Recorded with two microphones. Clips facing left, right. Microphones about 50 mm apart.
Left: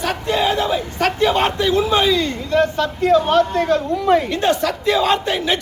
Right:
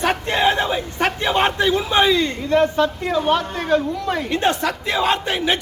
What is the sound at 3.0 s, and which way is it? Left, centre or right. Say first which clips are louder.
Speech: left 5 dB; centre.